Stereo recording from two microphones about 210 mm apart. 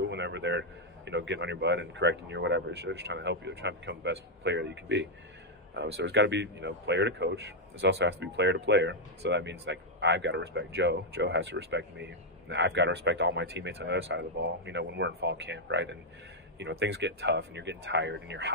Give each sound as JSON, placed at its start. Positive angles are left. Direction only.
{"t": 0.1, "sound": "speech", "side_deg": -55}